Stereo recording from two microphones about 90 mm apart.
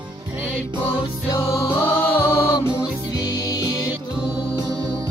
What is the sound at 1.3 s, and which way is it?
Music, 40° left (ahead or behind).